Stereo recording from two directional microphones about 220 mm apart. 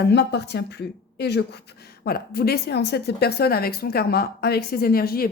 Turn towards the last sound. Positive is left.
turn(degrees=45)  # may be behind; listen again after turning